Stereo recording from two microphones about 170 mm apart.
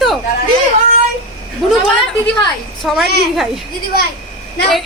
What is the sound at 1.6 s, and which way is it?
Speech, centre (ahead or behind).